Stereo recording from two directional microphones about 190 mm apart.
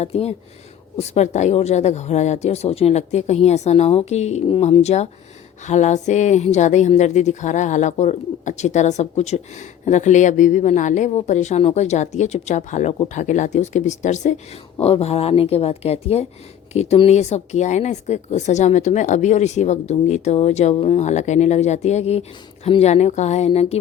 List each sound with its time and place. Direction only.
0.0 s speech: 35° left (ahead or behind)